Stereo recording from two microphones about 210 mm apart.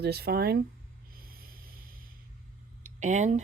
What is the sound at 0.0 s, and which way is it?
Speech, 50° right (ahead or behind).